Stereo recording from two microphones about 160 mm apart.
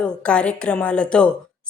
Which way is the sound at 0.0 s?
5° left (ahead or behind).